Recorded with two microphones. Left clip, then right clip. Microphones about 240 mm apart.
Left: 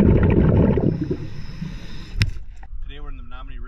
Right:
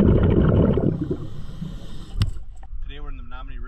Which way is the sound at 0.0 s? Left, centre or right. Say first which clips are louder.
Left 1 dB; right.